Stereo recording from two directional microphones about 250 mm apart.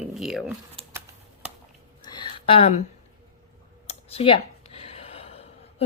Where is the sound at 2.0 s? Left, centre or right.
Centre.